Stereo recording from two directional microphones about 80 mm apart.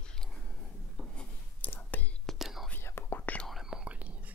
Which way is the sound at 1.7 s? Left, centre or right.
Left.